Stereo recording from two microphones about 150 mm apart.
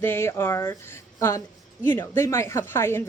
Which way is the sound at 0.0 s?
15° left (ahead or behind).